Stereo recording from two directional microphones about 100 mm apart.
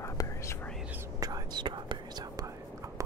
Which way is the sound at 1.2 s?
45° right (ahead or behind).